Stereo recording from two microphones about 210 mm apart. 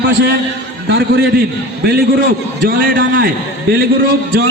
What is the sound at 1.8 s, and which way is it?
A man's voice, 50° right (ahead or behind).